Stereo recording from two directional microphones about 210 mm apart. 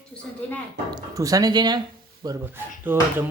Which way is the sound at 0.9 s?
15° right (ahead or behind).